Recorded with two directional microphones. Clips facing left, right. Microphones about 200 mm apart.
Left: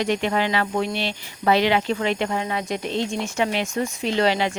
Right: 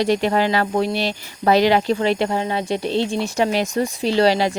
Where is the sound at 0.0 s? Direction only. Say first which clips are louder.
Right 4 dB; 35° right (ahead or behind).